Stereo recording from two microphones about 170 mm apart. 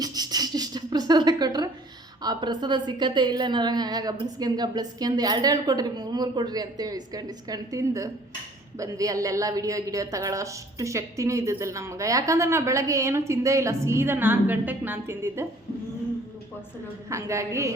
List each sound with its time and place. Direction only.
0.0 s a sound: 25° right (ahead or behind)
2.2 s a woman's voice: 25° right (ahead or behind)
17.1 s a woman's voice: 15° right (ahead or behind)